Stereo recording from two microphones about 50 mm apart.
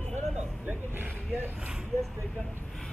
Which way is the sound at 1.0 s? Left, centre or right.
Right.